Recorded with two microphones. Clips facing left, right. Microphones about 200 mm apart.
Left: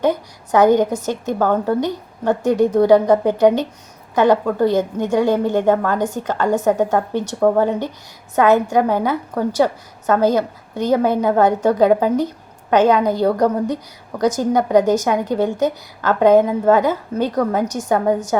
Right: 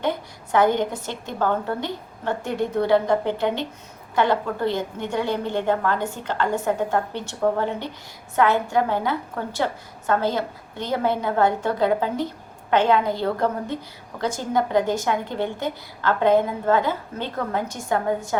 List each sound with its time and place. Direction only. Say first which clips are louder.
0.6 s a woman's voice: left 7 dB; 40° left (ahead or behind)
8.4 s a woman's voice: left 10 dB; 40° left (ahead or behind)